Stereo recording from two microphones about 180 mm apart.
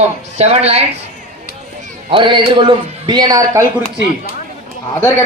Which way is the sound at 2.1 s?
25° right (ahead or behind).